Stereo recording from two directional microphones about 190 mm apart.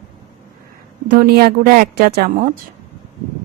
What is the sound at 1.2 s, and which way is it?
A woman's voice, 55° right (ahead or behind).